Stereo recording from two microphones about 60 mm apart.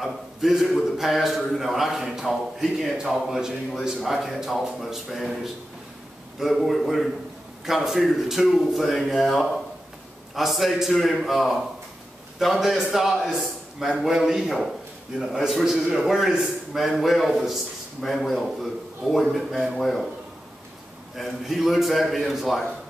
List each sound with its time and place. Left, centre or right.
0.0 s a man's voice: centre
21.2 s a man's voice: centre